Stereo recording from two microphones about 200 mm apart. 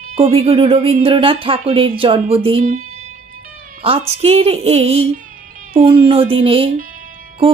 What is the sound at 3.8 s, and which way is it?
Speech, 30° right (ahead or behind).